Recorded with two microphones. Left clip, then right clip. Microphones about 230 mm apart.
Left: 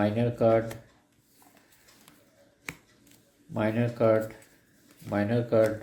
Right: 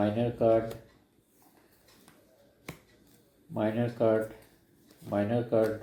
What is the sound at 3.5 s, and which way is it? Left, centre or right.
Speech, left.